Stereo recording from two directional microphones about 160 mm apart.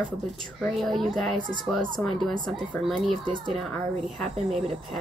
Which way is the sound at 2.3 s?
30° right (ahead or behind).